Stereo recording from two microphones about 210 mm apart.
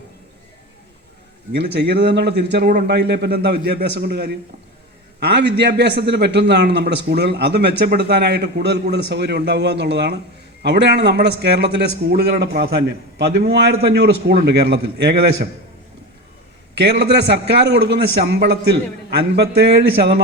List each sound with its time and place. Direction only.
1.5 s a man's voice: 55° right (ahead or behind)
17.0 s a man's voice: 55° right (ahead or behind)